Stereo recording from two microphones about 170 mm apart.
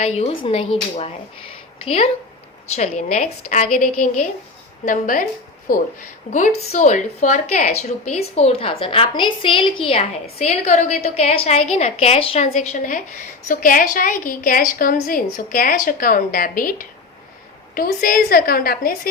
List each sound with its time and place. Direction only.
0.0 s a woman's voice: 40° left (ahead or behind); by 18.9 s 60° left (ahead or behind)